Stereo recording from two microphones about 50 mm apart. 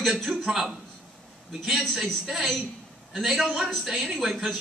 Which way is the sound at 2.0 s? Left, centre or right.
Centre.